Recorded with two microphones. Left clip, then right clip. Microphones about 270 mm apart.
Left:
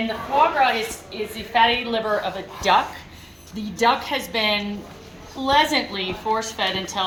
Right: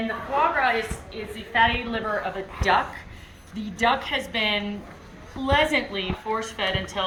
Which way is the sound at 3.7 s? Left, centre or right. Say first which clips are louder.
Left 3 dB; left.